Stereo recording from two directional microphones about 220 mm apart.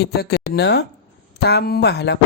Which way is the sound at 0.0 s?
45° left (ahead or behind).